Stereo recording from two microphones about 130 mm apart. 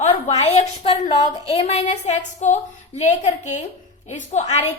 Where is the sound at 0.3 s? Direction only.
55° left (ahead or behind).